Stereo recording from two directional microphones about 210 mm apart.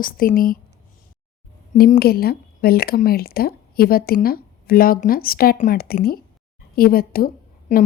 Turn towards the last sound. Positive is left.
turn(degrees=40)  # may be behind; listen again after turning